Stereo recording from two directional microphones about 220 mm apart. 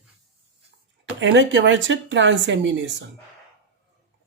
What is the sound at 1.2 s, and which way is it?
Speech, 55° right (ahead or behind).